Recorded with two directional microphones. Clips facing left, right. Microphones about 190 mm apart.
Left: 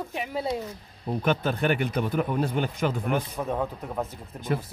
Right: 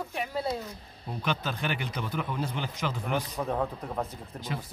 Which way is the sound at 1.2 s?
50° left (ahead or behind).